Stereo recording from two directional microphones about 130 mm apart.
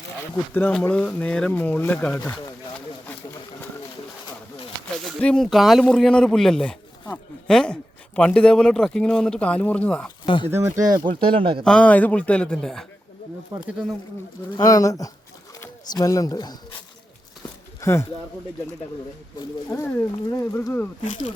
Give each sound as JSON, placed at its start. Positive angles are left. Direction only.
{"t": 0.5, "sound": "speech", "side_deg": 10}
{"t": 5.0, "sound": "speech", "side_deg": 5}
{"t": 10.2, "sound": "speech", "side_deg": 40}
{"t": 10.5, "sound": "speech", "side_deg": -25}
{"t": 11.1, "sound": "speech", "side_deg": -45}
{"t": 11.6, "sound": "speech", "side_deg": 5}
{"t": 13.6, "sound": "speech", "side_deg": -5}
{"t": 14.6, "sound": "speech", "side_deg": 25}
{"t": 17.7, "sound": "a sound", "side_deg": 20}
{"t": 19.7, "sound": "speech", "side_deg": 20}
{"t": 21.0, "sound": "speech", "side_deg": 70}